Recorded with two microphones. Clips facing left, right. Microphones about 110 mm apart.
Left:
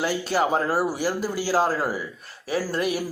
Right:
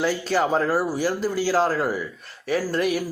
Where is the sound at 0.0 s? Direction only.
10° left (ahead or behind).